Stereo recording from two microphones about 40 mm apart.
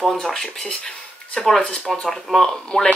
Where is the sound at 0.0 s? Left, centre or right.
Centre.